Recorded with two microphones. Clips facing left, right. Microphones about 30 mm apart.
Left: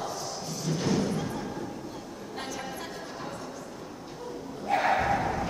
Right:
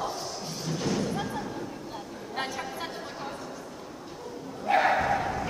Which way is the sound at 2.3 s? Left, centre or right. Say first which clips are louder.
Right 4 dB; right.